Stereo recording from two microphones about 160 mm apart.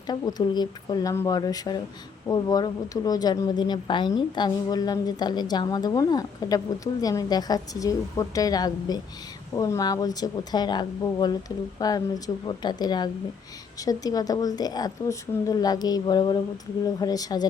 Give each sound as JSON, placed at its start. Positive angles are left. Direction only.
{"t": 0.1, "sound": "a woman's voice", "side_deg": 25}